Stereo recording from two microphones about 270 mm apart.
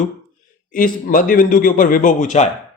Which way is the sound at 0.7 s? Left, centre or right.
Left.